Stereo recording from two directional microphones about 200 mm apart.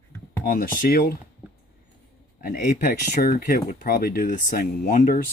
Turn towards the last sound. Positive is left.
turn(degrees=50)  # may be behind; listen again after turning